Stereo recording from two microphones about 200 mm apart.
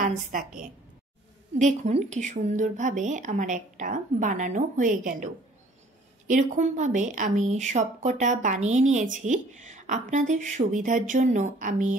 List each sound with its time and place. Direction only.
0.0 s a woman's voice: 40° right (ahead or behind)
1.6 s speech: 35° right (ahead or behind)